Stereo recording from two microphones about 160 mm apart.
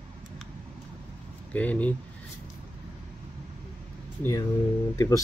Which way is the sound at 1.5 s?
10° left (ahead or behind).